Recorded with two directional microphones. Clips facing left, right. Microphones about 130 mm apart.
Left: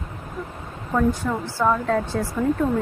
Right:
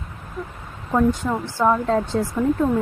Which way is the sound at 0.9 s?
20° right (ahead or behind).